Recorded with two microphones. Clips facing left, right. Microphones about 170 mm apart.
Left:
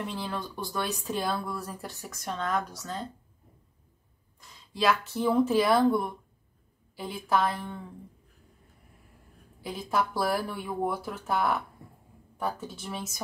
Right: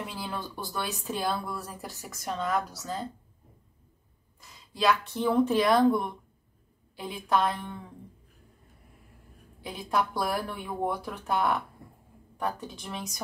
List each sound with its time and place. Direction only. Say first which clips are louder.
0.0 s speech: left 2 dB; 5° right (ahead or behind)
4.4 s speech: even; centre (ahead or behind)
9.6 s speech: even; centre (ahead or behind)